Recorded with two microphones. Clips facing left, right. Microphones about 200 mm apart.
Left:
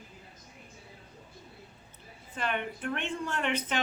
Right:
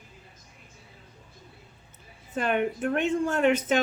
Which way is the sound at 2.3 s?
45° right (ahead or behind).